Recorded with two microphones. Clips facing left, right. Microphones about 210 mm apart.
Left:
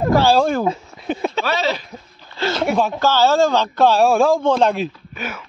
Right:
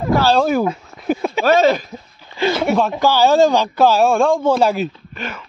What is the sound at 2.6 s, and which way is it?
Speech, centre (ahead or behind).